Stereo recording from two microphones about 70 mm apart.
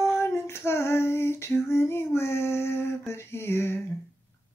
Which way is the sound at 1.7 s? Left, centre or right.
Left.